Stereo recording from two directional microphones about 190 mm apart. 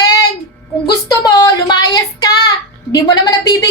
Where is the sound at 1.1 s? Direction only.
20° left (ahead or behind).